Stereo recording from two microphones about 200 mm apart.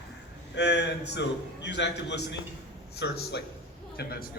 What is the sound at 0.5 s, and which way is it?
A man's voice, 60° left (ahead or behind).